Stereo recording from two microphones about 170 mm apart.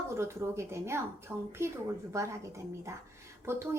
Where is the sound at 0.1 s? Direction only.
15° right (ahead or behind).